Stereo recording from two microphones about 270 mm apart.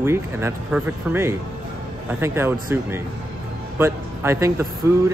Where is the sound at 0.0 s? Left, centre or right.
Centre.